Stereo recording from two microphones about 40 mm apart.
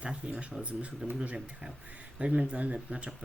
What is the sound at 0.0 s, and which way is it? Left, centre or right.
Speech, right.